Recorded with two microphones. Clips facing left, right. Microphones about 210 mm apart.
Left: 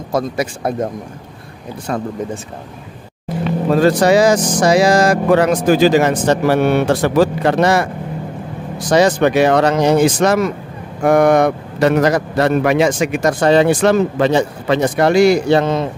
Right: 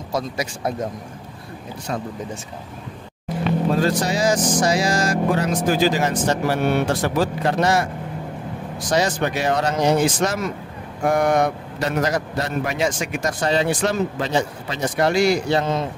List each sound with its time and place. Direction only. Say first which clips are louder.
0.1 s speech: left 7 dB; 55° left (ahead or behind)
1.9 s speech: left 6 dB; 55° left (ahead or behind)
3.7 s a man's voice: left 9 dB; 70° left (ahead or behind)
8.9 s a man's voice: left 9 dB; 70° left (ahead or behind)